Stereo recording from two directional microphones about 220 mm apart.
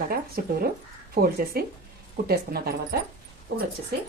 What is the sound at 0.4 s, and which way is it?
Speech, 45° right (ahead or behind).